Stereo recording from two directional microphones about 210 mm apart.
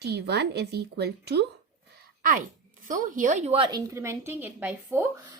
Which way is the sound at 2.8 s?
40° right (ahead or behind).